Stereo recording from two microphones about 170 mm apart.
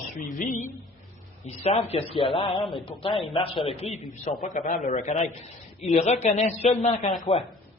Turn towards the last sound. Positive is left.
turn(degrees=40)  # may be behind; listen again after turning